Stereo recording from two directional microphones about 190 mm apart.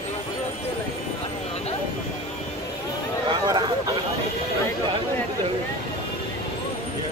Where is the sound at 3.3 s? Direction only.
20° right (ahead or behind).